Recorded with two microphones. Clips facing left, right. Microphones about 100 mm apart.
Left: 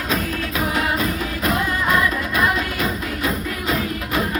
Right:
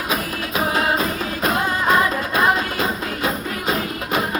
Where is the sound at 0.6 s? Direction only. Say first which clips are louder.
Right 2 dB; 30° right (ahead or behind).